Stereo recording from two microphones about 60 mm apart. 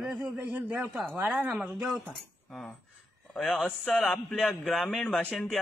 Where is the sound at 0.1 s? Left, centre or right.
Right.